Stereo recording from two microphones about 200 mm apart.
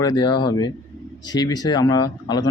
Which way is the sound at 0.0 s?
20° left (ahead or behind).